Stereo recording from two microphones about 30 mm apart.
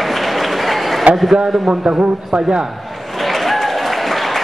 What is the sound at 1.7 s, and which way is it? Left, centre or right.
Speech, right.